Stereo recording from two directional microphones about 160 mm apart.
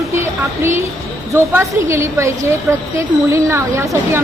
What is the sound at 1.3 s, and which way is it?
A woman's voice, 15° right (ahead or behind).